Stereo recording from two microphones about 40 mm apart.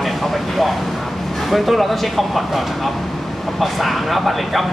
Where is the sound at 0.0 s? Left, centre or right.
Centre.